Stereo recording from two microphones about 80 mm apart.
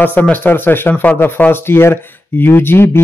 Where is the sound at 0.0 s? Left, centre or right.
Left.